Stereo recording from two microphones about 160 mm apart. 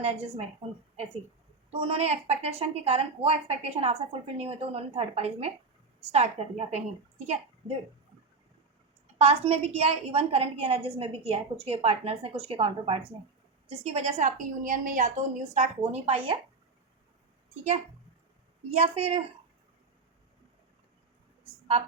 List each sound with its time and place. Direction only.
0.0 s a woman's voice: 40° right (ahead or behind)
1.7 s a woman's voice: 35° right (ahead or behind)
9.1 s a woman's voice: 40° right (ahead or behind)
18.9 s a woman's voice: 35° right (ahead or behind)